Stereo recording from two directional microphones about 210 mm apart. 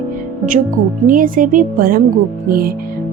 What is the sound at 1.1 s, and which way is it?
A woman's voice, 40° right (ahead or behind).